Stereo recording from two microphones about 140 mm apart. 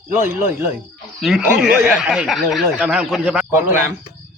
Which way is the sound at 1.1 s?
Centre (ahead or behind).